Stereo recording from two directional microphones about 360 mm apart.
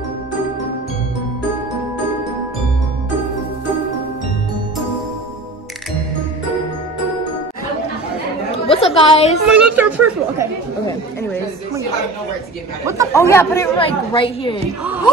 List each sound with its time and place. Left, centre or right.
8.6 s a woman's voice: centre
9.5 s speech: centre
12.8 s speech: centre
13.3 s a man's voice: centre